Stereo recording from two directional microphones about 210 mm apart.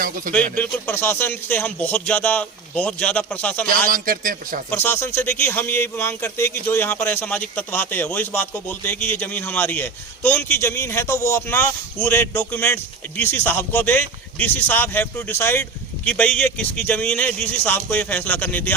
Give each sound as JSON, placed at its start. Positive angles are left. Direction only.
{"t": 0.3, "sound": "a man's voice", "side_deg": 10}
{"t": 3.8, "sound": "a man's voice", "side_deg": -40}
{"t": 4.7, "sound": "a man's voice", "side_deg": 10}